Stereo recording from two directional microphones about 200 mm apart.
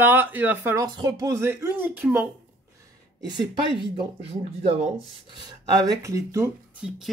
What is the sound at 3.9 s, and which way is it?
Speech, 30° right (ahead or behind).